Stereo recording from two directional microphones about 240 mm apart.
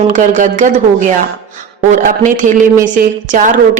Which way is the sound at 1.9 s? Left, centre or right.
Right.